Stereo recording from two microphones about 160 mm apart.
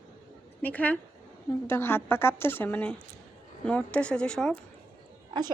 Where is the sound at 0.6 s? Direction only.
10° left (ahead or behind).